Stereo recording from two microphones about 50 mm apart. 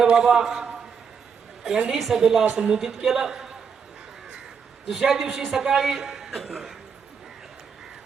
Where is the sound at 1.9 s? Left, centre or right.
Centre.